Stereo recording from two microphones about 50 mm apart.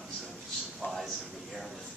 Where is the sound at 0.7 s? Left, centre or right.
Centre.